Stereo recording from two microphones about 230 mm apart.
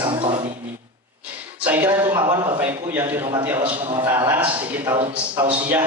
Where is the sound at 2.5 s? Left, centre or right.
Centre.